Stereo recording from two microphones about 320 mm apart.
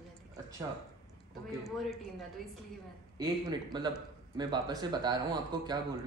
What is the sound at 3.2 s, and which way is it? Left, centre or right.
Speech, centre.